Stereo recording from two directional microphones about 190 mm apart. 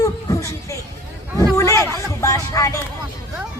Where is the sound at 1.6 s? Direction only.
15° left (ahead or behind).